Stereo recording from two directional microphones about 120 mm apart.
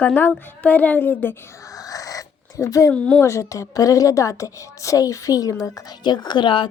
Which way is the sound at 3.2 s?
25° left (ahead or behind).